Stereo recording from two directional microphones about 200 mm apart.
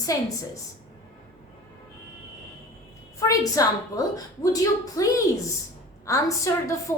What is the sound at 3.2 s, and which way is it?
A woman's voice, 15° left (ahead or behind).